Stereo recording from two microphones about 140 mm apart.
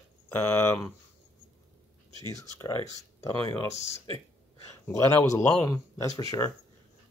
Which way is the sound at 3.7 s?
50° left (ahead or behind).